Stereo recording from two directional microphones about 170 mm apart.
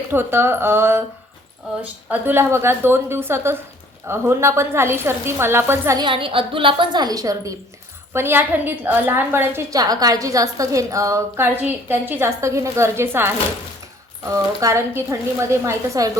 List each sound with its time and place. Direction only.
0.1 s a woman's voice: 15° right (ahead or behind)
6.0 s a woman's voice: 30° right (ahead or behind); by 13.3 s 15° right (ahead or behind)
14.3 s a woman's voice: 15° right (ahead or behind)